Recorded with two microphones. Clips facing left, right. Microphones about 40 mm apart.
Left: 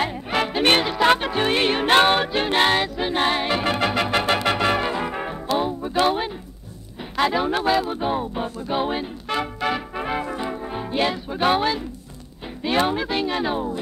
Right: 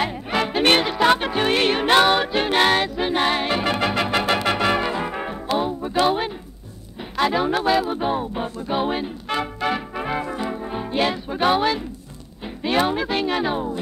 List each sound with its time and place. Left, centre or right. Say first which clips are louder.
0.0 s music: even; centre
1.9 s music: even; left
2.2 s music: right 1 dB; centre
6.0 s a sound: right 1 dB; centre
7.0 s music: right 1 dB; centre
12.6 s speech: right 1 dB; centre